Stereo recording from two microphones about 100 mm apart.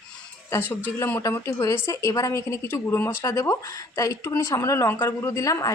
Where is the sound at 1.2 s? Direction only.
30° left (ahead or behind).